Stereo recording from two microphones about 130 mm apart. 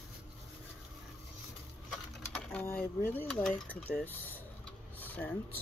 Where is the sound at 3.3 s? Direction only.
5° left (ahead or behind).